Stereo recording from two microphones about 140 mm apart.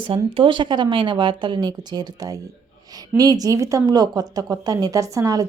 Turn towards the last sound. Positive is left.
turn(degrees=-25)  # may be behind; listen again after turning